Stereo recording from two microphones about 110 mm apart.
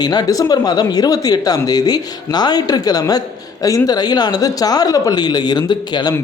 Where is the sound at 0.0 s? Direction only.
40° left (ahead or behind).